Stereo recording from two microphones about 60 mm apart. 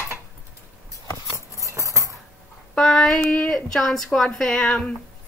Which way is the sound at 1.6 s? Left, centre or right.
Right.